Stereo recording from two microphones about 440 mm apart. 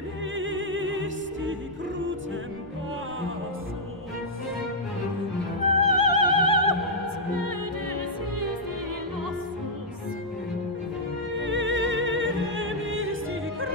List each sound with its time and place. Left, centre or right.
0.4 s music: right
5.7 s music: right
11.4 s music: right